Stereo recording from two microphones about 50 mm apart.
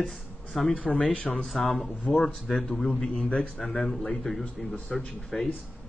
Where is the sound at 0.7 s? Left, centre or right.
Centre.